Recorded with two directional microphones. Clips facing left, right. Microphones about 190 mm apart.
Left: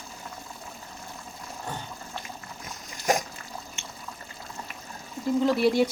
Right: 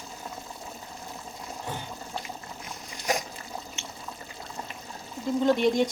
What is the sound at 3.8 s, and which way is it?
Water, 50° left (ahead or behind).